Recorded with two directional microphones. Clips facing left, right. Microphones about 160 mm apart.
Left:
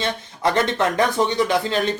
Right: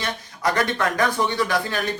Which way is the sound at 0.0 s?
25° left (ahead or behind).